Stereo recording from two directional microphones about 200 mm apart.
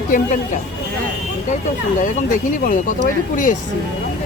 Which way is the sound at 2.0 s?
40° left (ahead or behind).